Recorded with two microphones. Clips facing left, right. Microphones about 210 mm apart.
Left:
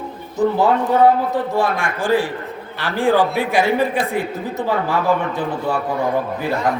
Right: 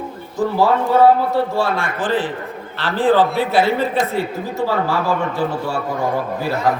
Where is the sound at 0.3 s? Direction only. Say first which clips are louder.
Left 1 dB; 20° left (ahead or behind).